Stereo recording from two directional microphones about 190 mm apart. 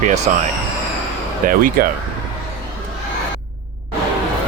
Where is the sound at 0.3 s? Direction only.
40° right (ahead or behind).